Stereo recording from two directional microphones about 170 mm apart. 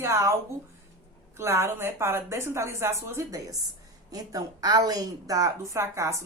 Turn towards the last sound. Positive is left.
turn(degrees=-15)  # may be behind; listen again after turning